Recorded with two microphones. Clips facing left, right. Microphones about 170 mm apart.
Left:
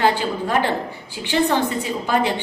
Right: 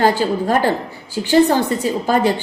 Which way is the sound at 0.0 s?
40° right (ahead or behind).